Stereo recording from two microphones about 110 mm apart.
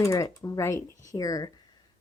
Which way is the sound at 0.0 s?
30° left (ahead or behind).